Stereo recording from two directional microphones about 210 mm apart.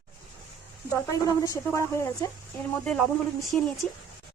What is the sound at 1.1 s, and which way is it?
Speech, 15° left (ahead or behind).